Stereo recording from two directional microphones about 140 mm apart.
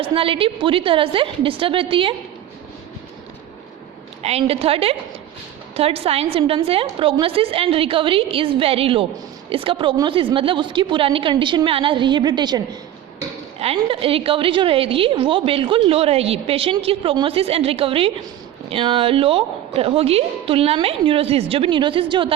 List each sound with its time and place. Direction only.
0.0 s a woman's voice: 40° right (ahead or behind)
4.2 s a woman's voice: 45° right (ahead or behind); by 12.6 s 30° right (ahead or behind)
13.6 s a woman's voice: 45° right (ahead or behind)